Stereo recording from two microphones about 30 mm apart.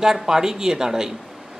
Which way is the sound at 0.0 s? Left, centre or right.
Centre.